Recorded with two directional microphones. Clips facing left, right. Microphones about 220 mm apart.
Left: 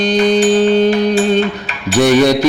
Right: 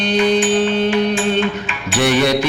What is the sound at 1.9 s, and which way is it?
Mantra, 40° left (ahead or behind).